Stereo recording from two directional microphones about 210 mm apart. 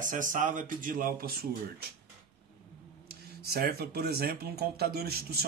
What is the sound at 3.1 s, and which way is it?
Speech, 45° right (ahead or behind).